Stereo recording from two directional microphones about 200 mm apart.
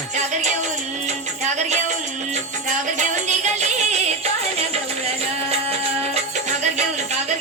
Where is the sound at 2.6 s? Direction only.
35° right (ahead or behind).